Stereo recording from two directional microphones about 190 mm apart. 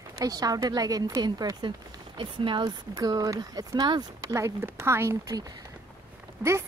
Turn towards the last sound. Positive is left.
turn(degrees=-10)  # may be behind; listen again after turning